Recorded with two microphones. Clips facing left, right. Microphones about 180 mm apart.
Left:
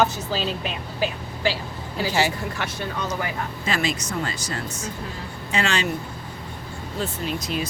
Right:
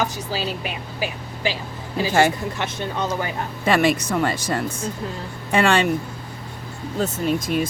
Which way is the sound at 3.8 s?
60° right (ahead or behind).